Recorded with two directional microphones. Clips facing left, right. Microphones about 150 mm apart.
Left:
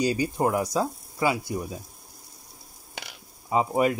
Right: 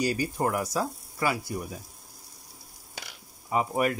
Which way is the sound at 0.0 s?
20° left (ahead or behind).